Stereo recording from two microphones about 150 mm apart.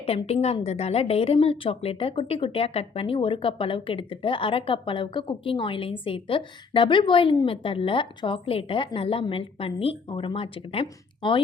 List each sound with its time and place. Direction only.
0.0 s a woman's voice: 40° left (ahead or behind)